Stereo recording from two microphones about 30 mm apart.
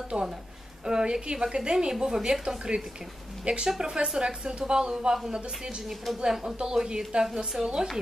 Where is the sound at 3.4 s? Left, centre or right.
Right.